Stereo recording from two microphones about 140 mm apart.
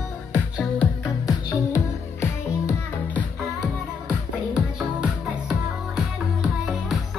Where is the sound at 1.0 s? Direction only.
25° left (ahead or behind).